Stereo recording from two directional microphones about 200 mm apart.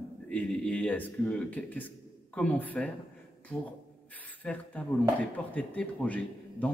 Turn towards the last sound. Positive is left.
turn(degrees=5)  # may be behind; listen again after turning